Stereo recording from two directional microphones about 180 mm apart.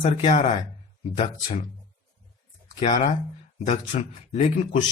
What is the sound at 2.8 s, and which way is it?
Speech, 45° left (ahead or behind).